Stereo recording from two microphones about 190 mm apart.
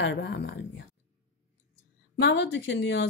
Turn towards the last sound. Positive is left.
turn(degrees=65)  # may be behind; listen again after turning